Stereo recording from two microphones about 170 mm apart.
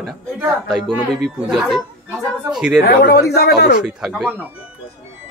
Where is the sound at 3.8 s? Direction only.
5° right (ahead or behind).